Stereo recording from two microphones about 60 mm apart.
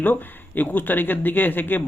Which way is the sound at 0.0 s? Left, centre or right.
Left.